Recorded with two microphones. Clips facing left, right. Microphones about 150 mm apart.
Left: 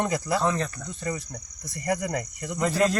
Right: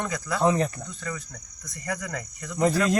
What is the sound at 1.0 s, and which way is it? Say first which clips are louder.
Speech: left 5 dB; 25° left (ahead or behind).